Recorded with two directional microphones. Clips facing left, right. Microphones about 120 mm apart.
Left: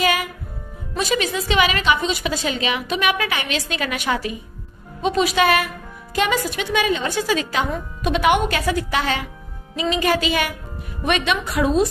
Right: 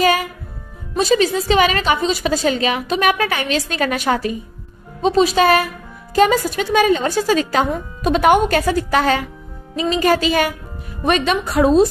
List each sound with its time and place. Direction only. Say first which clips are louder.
0.0 s music: right 4 dB; 40° right (ahead or behind)
0.9 s a woman's voice: right 6 dB; 35° right (ahead or behind)